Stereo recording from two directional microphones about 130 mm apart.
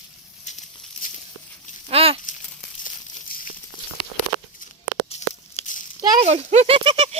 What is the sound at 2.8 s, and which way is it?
Crumpling, 90° left.